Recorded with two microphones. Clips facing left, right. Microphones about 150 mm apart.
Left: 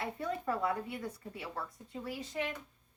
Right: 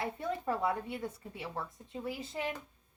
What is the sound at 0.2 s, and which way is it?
A woman's voice, 25° right (ahead or behind).